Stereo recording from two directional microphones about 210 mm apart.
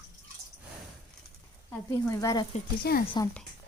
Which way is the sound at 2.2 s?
15° left (ahead or behind).